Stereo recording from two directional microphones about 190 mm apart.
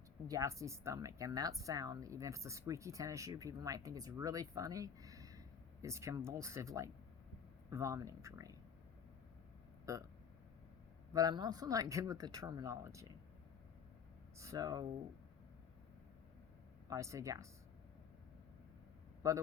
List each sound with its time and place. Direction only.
0.3 s speech: 15° right (ahead or behind)
11.1 s speech: 20° right (ahead or behind)
14.3 s speech: 15° right (ahead or behind)
16.9 s speech: 15° right (ahead or behind)
19.2 s speech: 20° right (ahead or behind)